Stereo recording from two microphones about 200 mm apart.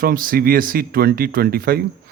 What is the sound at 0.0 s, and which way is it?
Speech, 45° right (ahead or behind).